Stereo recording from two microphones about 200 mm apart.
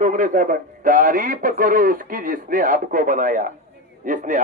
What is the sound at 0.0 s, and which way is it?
Speech, 40° right (ahead or behind).